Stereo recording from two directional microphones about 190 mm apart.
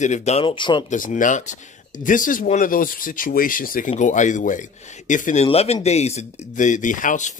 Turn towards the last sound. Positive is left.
turn(degrees=40)  # may be behind; listen again after turning